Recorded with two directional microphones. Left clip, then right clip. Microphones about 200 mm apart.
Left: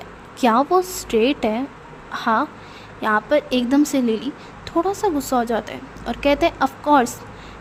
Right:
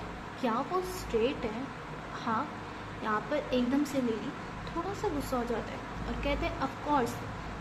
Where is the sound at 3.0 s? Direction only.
55° left (ahead or behind).